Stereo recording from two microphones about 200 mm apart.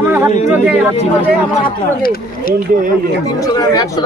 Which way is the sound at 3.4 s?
20° left (ahead or behind).